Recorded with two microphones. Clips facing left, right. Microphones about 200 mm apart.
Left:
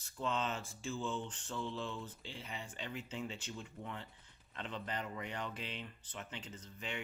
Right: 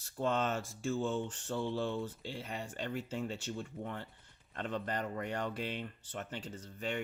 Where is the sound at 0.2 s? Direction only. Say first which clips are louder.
Right 5 dB; 50° right (ahead or behind).